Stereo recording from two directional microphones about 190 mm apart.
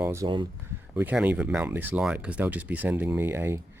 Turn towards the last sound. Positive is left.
turn(degrees=-10)  # may be behind; listen again after turning